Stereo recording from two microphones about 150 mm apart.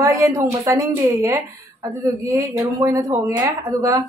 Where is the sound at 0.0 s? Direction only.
20° right (ahead or behind).